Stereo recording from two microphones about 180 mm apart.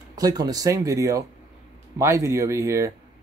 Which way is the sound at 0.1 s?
20° right (ahead or behind).